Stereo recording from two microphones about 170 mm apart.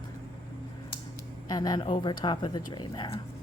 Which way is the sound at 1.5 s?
25° left (ahead or behind).